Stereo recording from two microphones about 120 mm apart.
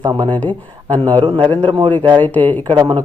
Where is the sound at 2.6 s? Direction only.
35° right (ahead or behind).